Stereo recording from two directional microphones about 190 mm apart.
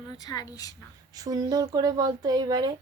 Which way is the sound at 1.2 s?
20° right (ahead or behind).